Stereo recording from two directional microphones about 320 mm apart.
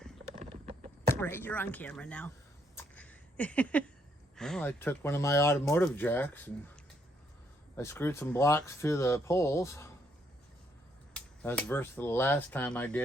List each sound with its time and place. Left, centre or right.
0.3 s a sound: centre
1.2 s speech: centre
2.7 s a sound: centre
4.4 s speech: centre
7.8 s speech: centre
11.1 s speech: centre